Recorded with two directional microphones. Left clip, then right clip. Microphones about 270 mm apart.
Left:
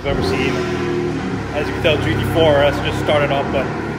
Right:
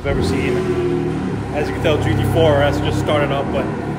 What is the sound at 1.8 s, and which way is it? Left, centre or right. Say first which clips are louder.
Speech: left 2 dB; centre.